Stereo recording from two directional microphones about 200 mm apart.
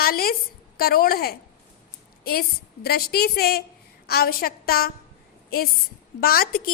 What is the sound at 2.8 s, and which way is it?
A woman's voice, 50° left (ahead or behind).